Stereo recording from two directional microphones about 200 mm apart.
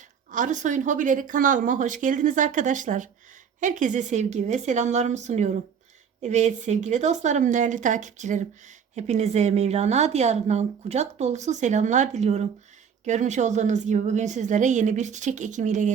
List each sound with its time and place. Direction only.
0.3 s speech: 40° right (ahead or behind)